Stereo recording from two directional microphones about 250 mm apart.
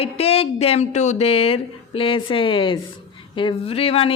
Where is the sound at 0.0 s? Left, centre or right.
Left.